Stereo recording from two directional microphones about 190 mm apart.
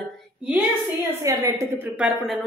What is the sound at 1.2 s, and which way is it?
A woman's voice, 15° right (ahead or behind).